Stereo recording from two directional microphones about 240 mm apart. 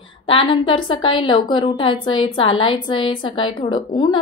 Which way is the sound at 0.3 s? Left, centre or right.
Left.